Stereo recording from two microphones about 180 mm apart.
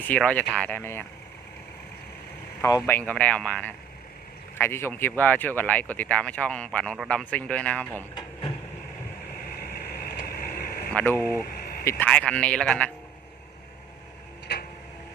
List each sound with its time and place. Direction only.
0.1 s speech: 5° left (ahead or behind)
2.6 s speech: 15° left (ahead or behind)
8.1 s a sound: 30° left (ahead or behind)
9.4 s vehicle: 60° left (ahead or behind)
10.9 s speech: 10° left (ahead or behind)
11.4 s a sound: 60° left (ahead or behind)
11.9 s speech: 10° left (ahead or behind)